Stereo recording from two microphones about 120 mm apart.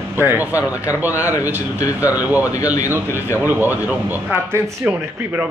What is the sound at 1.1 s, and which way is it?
Speech, 25° left (ahead or behind).